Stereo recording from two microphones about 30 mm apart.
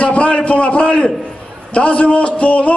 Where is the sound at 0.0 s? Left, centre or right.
Left.